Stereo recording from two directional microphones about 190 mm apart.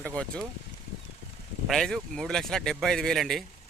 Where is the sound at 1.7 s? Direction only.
Centre (ahead or behind).